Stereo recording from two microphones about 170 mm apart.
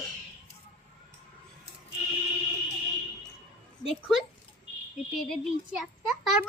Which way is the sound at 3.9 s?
Centre (ahead or behind).